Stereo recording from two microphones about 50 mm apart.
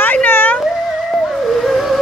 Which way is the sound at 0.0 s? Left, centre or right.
Left.